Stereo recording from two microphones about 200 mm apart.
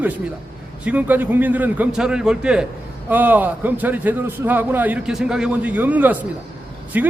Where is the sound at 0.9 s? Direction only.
10° right (ahead or behind).